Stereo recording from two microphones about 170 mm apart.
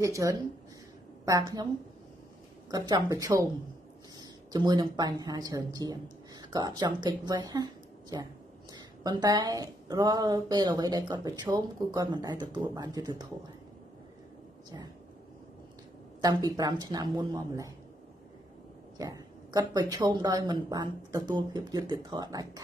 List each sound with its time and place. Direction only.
0.0 s speech: 20° right (ahead or behind)
2.7 s speech: 20° right (ahead or behind)
16.2 s speech: 25° right (ahead or behind)
18.9 s speech: 20° right (ahead or behind)